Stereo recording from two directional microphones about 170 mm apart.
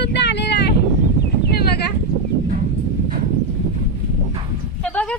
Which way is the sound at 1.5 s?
70° left (ahead or behind).